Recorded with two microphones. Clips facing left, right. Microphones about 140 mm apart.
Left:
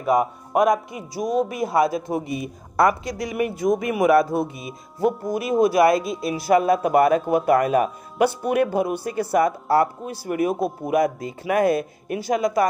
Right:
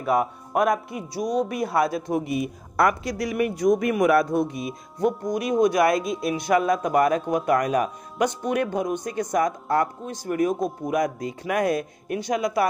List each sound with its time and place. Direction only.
0.0 s speech: centre (ahead or behind)